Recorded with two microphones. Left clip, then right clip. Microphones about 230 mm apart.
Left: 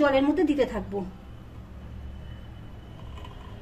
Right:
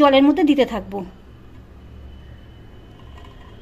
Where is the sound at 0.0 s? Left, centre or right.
Right.